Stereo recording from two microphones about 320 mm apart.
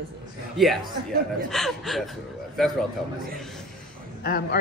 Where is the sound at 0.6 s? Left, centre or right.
Centre.